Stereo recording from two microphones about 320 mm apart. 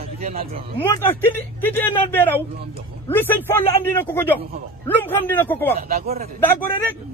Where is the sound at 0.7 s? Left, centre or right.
Centre.